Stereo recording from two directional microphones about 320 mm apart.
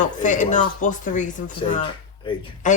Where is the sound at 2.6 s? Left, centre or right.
Left.